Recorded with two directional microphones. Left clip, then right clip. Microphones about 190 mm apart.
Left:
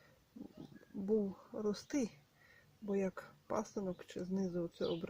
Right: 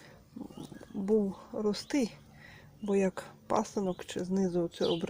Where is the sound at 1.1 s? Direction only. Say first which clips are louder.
Right 7 dB; 15° left (ahead or behind).